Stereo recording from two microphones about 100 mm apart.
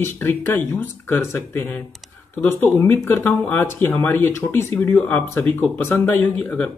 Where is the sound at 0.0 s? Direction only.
20° left (ahead or behind).